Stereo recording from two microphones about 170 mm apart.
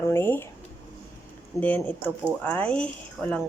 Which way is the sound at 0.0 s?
15° left (ahead or behind).